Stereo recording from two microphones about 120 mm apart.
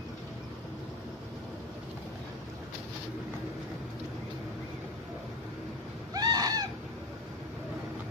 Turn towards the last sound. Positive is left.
turn(degrees=-35)  # may be behind; listen again after turning